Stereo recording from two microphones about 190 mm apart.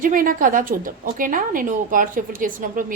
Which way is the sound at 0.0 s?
45° right (ahead or behind).